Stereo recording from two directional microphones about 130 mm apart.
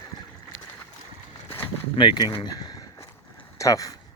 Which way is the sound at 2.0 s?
35° left (ahead or behind).